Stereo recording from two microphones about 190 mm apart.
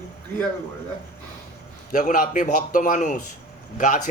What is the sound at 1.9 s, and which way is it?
A man's voice, 45° left (ahead or behind).